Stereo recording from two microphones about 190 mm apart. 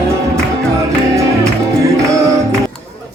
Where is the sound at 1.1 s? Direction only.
15° right (ahead or behind).